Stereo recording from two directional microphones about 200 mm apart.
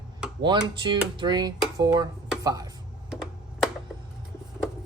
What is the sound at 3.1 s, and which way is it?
Computer keyboard, 5° right (ahead or behind).